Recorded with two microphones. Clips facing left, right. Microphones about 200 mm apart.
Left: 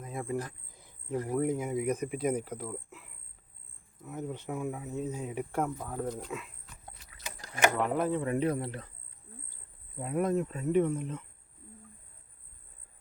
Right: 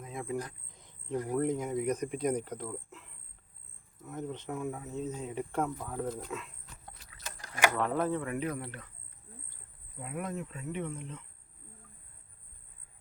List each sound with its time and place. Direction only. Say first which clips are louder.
0.2 s speech: left 2 dB; 5° left (ahead or behind)
7.5 s speech: left 2 dB; 20° left (ahead or behind)
8.2 s speech: left 5 dB; 30° left (ahead or behind)
10.0 s speech: left 9 dB; 40° left (ahead or behind)